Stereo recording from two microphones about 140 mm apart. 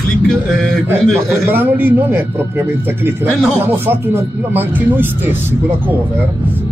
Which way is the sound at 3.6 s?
15° right (ahead or behind).